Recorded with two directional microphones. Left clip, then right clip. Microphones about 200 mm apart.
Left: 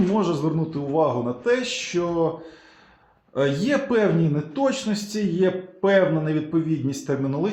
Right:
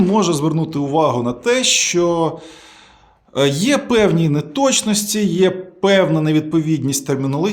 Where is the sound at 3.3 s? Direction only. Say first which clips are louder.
Right 6 dB; 25° right (ahead or behind).